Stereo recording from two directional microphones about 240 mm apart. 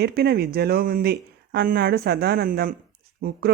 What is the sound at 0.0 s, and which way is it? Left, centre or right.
Speech, right.